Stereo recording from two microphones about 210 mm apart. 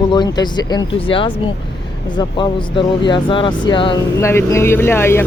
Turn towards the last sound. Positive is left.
turn(degrees=10)  # may be behind; listen again after turning